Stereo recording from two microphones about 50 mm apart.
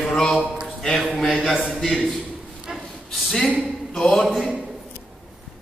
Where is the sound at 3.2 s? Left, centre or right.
Centre.